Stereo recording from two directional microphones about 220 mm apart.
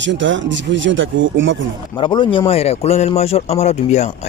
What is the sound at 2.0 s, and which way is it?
Speech, 20° left (ahead or behind).